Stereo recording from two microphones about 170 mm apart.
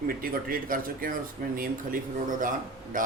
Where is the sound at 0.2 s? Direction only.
60° right (ahead or behind).